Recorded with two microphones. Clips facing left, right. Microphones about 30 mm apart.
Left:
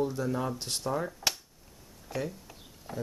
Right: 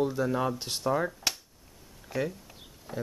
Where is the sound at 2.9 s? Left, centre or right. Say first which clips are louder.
Right 1 dB; centre.